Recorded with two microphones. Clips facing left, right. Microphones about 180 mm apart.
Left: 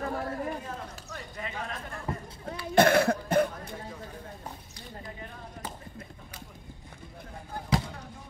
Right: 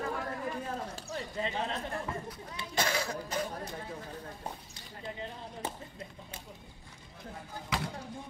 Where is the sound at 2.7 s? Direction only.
60° left (ahead or behind).